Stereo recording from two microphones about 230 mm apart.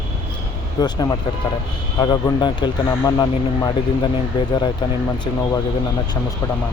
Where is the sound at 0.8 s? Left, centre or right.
Centre.